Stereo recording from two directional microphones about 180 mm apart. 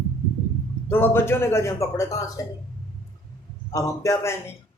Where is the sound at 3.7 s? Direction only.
15° left (ahead or behind).